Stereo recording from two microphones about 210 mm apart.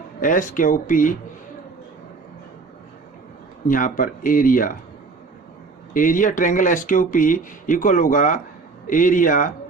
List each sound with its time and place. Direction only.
0.2 s speech: 40° left (ahead or behind)
3.7 s speech: 40° left (ahead or behind)
5.9 s speech: 40° left (ahead or behind)